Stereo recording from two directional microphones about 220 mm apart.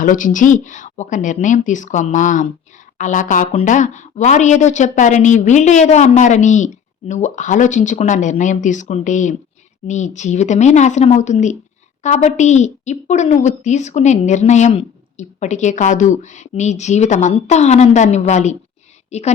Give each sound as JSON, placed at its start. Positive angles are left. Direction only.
{"t": 0.0, "sound": "a woman's voice", "side_deg": 35}